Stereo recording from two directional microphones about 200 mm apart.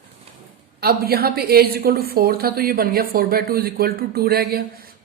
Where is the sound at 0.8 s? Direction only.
50° right (ahead or behind).